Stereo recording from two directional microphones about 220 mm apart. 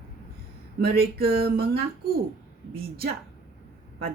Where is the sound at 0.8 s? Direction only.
45° right (ahead or behind).